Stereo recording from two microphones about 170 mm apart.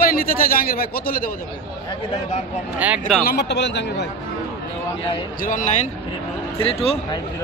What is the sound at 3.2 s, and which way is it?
Speech, 80° left.